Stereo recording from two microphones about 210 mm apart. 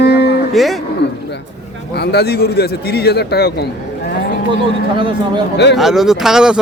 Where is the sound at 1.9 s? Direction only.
50° left (ahead or behind).